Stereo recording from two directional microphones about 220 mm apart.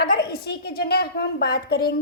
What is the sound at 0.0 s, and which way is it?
A woman's voice, 45° left (ahead or behind).